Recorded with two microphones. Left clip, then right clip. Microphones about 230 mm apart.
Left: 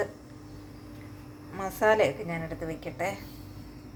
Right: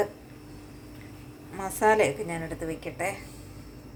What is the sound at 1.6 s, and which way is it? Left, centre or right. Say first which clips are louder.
A woman's voice: right 1 dB; centre.